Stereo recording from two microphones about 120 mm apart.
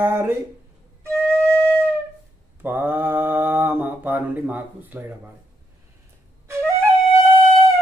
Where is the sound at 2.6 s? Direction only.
15° right (ahead or behind).